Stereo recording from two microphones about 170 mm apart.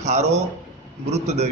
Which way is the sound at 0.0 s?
40° right (ahead or behind).